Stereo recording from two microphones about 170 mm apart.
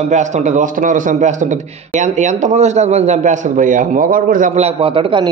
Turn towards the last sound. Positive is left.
turn(degrees=-30)  # may be behind; listen again after turning